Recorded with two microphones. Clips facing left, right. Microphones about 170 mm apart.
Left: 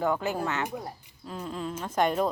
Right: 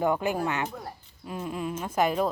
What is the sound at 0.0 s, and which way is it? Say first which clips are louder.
Speech: right 2 dB; 15° right (ahead or behind).